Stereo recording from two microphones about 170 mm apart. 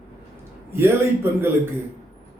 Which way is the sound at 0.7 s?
15° right (ahead or behind).